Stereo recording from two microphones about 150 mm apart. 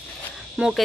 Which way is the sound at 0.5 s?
5° right (ahead or behind).